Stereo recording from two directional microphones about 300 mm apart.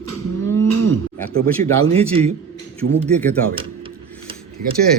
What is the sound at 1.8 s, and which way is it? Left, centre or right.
Speech, centre.